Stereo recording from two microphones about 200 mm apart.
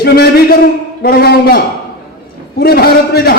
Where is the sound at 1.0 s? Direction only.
50° left (ahead or behind).